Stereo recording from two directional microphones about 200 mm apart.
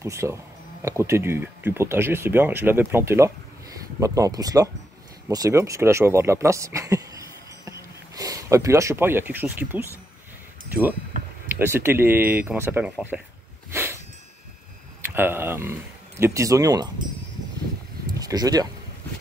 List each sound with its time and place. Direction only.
0.0 s speech: 15° right (ahead or behind)
13.7 s dog: 10° right (ahead or behind)
15.0 s speech: 10° right (ahead or behind)
18.2 s speech: 20° right (ahead or behind)